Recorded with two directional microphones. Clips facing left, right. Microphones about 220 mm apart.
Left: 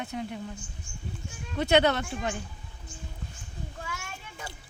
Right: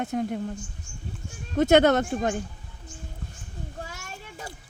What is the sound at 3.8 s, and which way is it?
Children playing, 40° right (ahead or behind).